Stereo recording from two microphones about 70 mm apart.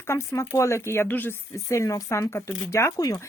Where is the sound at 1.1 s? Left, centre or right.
Left.